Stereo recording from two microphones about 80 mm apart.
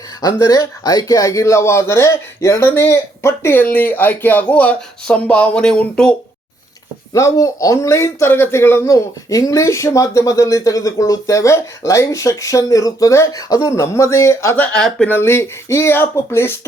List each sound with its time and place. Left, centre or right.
0.2 s speech: left; by 6.1 s centre
7.1 s a man's voice: left
9.3 s speech: left
14.5 s speech: centre
14.8 s speech: centre
15.2 s a man's voice: left